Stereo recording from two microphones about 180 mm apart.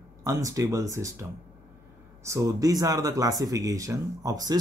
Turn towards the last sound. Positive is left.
turn(degrees=-20)  # may be behind; listen again after turning